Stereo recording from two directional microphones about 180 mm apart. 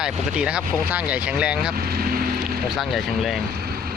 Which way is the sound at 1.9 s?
55° right (ahead or behind).